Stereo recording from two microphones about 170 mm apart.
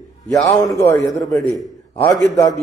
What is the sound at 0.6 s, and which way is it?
Speech, 15° left (ahead or behind).